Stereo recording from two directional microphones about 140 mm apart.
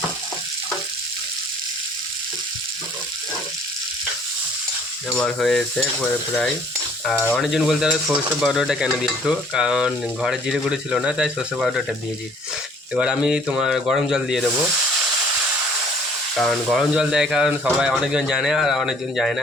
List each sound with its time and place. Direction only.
5.0 s stir: 5° left (ahead or behind)
16.3 s stir: centre (ahead or behind)